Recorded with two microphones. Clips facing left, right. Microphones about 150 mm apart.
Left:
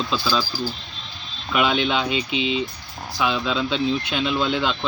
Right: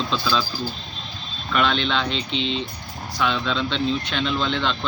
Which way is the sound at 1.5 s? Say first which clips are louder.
Left 1 dB; 10° left (ahead or behind).